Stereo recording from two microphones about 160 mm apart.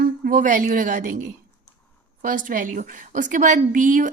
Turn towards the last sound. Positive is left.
turn(degrees=-55)  # may be behind; listen again after turning